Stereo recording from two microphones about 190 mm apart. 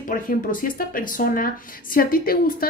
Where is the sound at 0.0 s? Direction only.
45° left (ahead or behind).